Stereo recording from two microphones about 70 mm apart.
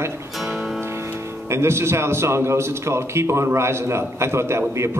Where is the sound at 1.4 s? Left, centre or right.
Right.